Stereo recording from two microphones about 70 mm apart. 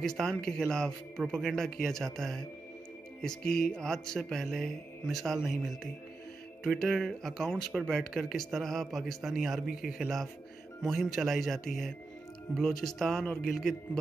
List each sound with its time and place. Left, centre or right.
0.0 s speech: centre